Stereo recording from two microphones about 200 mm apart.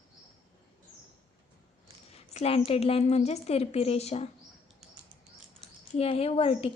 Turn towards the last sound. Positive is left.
turn(degrees=30)  # may be behind; listen again after turning